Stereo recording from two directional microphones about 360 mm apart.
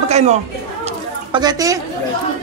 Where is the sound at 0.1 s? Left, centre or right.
Centre.